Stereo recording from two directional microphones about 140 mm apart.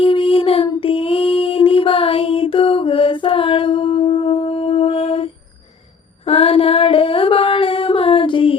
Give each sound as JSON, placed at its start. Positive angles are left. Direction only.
{"t": 0.0, "sound": "child singing", "side_deg": 40}
{"t": 0.8, "sound": "female singing", "side_deg": 40}
{"t": 6.2, "sound": "a sound", "side_deg": 45}